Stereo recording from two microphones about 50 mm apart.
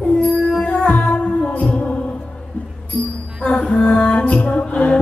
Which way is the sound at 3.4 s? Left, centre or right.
Centre.